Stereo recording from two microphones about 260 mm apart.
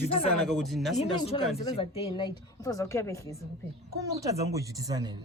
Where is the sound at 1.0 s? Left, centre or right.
Left.